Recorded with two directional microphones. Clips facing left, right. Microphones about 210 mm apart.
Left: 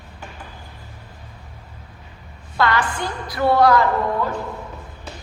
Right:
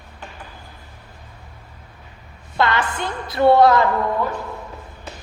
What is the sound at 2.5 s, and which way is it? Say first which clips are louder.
A woman's voice: even; 25° right (ahead or behind).